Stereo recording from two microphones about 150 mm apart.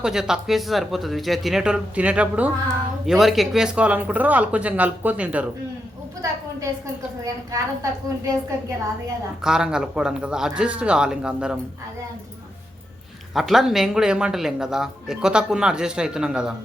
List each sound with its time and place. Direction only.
0.0 s speech: 5° right (ahead or behind)
7.5 s a woman's voice: 20° right (ahead or behind)
9.4 s speech: 5° right (ahead or behind)
13.3 s speech: centre (ahead or behind)